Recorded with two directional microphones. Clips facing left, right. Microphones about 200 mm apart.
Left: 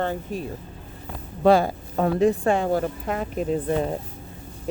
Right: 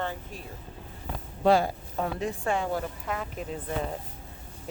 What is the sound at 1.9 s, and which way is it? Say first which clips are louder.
Speech: left 13 dB; 75° left (ahead or behind).